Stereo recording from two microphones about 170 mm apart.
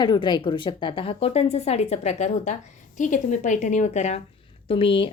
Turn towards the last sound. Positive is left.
turn(degrees=30)  # may be behind; listen again after turning